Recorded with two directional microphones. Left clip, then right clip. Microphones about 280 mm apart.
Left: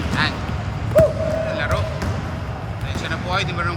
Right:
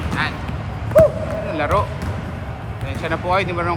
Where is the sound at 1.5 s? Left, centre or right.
Centre.